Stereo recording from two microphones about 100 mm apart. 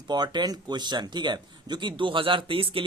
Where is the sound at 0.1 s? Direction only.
45° right (ahead or behind).